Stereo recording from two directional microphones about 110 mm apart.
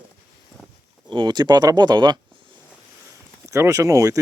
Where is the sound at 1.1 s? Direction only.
40° right (ahead or behind).